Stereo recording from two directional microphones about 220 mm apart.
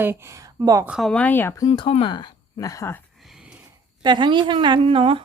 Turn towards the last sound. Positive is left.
turn(degrees=-25)  # may be behind; listen again after turning